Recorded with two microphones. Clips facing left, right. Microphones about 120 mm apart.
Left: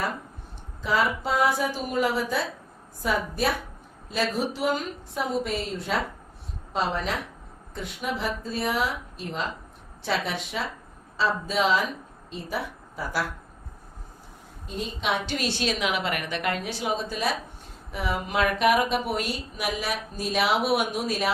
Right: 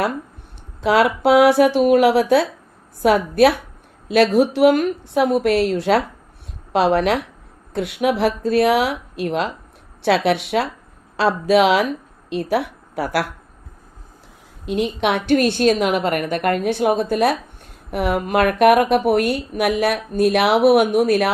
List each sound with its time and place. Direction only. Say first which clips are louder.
0.8 s a woman's voice: right 9 dB; 80° right
14.6 s a woman's voice: right 11 dB; 75° right (ahead or behind); by 21.3 s 60° right (ahead or behind)